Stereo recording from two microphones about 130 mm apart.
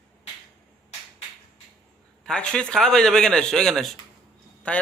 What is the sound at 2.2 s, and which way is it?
A man's voice, 5° left (ahead or behind).